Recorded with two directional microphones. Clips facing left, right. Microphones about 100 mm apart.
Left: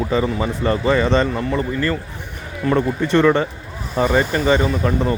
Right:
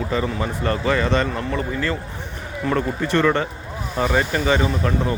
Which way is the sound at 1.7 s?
5° right (ahead or behind).